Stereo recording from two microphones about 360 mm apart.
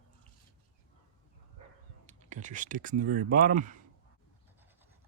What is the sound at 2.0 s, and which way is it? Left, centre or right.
Speech, centre.